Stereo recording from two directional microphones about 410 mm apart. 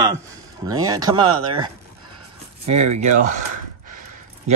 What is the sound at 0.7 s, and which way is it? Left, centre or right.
Speech, centre.